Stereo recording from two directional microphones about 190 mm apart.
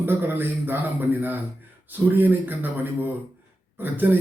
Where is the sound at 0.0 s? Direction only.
10° right (ahead or behind).